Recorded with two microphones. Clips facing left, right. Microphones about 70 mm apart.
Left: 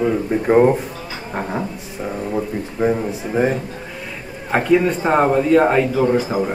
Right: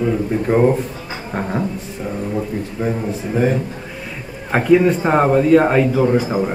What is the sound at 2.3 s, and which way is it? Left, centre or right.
Speech, centre.